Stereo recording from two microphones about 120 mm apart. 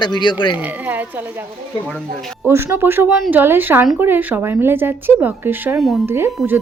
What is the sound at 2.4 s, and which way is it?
A woman's voice, 20° right (ahead or behind).